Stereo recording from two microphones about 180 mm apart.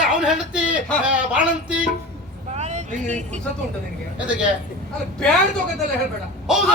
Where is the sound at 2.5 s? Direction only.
40° right (ahead or behind).